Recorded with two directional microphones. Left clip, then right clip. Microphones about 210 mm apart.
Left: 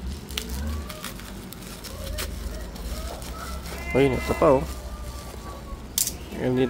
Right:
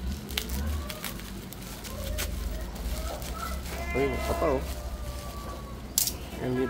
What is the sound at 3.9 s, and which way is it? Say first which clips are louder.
Speech: left 7 dB; 50° left (ahead or behind).